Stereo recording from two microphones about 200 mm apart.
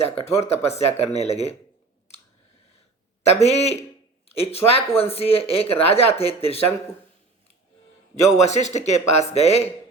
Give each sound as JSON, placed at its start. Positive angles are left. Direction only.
{"t": 0.0, "sound": "speech", "side_deg": 30}
{"t": 3.2, "sound": "speech", "side_deg": 35}
{"t": 8.4, "sound": "speech", "side_deg": 35}